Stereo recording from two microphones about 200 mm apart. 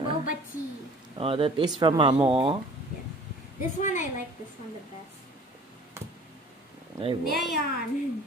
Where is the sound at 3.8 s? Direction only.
40° left (ahead or behind).